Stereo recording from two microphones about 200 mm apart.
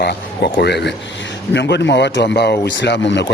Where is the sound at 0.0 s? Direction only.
55° left (ahead or behind).